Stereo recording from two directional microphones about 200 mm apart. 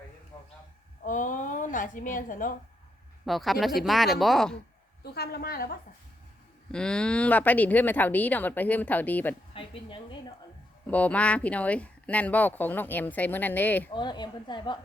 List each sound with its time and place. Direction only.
1.0 s a sound: 40° left (ahead or behind)
3.2 s speech: centre (ahead or behind)
5.1 s a woman's voice: 50° left (ahead or behind)
6.7 s speech: 5° left (ahead or behind)
9.6 s a woman's voice: 25° left (ahead or behind)
10.8 s speech: 5° left (ahead or behind)
13.9 s a woman's voice: 20° left (ahead or behind)